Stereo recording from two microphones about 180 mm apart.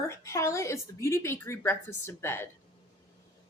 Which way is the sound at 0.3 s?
15° left (ahead or behind).